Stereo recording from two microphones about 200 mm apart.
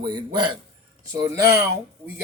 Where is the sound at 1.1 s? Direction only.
15° right (ahead or behind).